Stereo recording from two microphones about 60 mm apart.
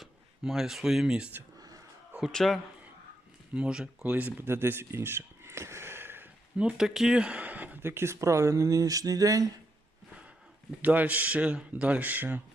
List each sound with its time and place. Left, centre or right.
0.0 s speech: centre
1.5 s a sound: right
2.3 s a man's voice: centre
3.5 s speech: centre
4.1 s a man's voice: right
4.4 s a sound: right
6.6 s speech: centre
7.8 s speech: right
10.8 s a man's voice: right